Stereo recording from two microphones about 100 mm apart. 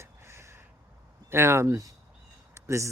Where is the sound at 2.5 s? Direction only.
30° right (ahead or behind).